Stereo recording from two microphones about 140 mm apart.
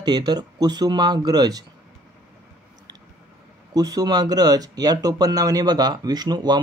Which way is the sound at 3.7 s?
25° right (ahead or behind).